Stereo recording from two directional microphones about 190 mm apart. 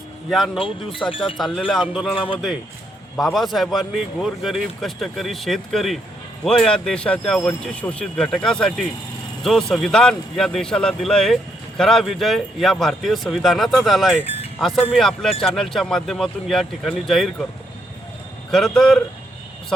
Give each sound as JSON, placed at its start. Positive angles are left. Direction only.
{"t": 0.3, "sound": "a man's voice", "side_deg": 0}
{"t": 1.1, "sound": "speech", "side_deg": 30}
{"t": 1.4, "sound": "a man's voice", "side_deg": 0}
{"t": 2.1, "sound": "speech", "side_deg": 25}
{"t": 3.2, "sound": "a man's voice", "side_deg": 0}
{"t": 18.5, "sound": "a man's voice", "side_deg": 0}